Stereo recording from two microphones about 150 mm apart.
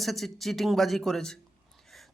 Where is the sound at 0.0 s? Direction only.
Centre (ahead or behind).